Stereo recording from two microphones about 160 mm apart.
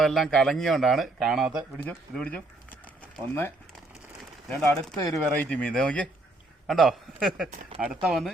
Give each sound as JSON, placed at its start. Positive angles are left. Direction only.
{"t": 0.0, "sound": "speech", "side_deg": 0}
{"t": 1.8, "sound": "speech", "side_deg": 10}
{"t": 4.9, "sound": "speech", "side_deg": 20}
{"t": 5.5, "sound": "speech", "side_deg": 5}